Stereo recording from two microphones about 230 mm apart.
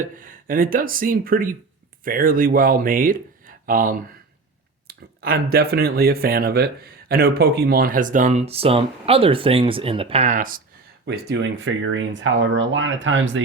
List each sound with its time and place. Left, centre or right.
0.0 s speech: right
11.0 s speech: right